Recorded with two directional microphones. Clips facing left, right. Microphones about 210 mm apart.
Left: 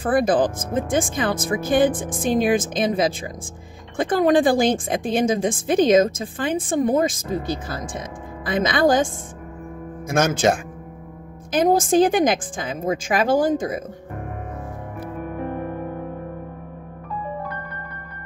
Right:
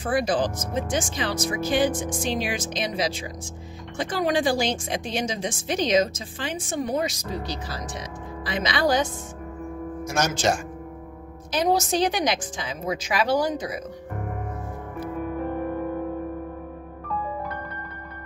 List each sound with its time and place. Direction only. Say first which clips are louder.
0.0 s a woman's voice: left 5 dB; 55° left (ahead or behind)